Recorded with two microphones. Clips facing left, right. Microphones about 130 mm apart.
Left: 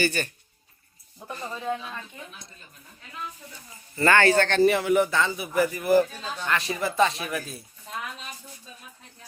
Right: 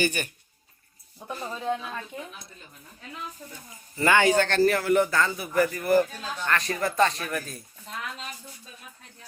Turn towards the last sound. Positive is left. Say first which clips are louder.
# left 1 dB
turn(degrees=5)  # may be behind; listen again after turning